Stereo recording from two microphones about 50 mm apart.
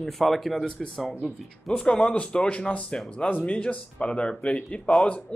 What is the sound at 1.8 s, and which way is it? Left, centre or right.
Speech, centre.